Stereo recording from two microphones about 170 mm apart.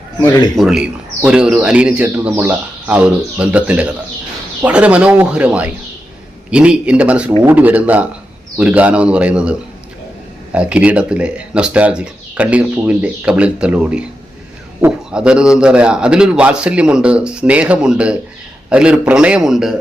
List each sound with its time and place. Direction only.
0.3 s a man's voice: 25° left (ahead or behind)
0.5 s a man's voice: centre (ahead or behind)